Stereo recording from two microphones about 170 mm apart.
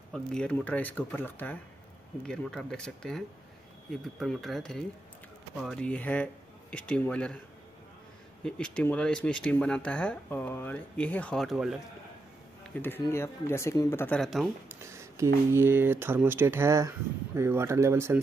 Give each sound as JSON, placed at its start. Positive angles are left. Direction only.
{"t": 0.1, "sound": "speech", "side_deg": 5}
{"t": 8.5, "sound": "speech", "side_deg": 5}
{"t": 12.7, "sound": "speech", "side_deg": 10}
{"t": 14.7, "sound": "speech", "side_deg": -15}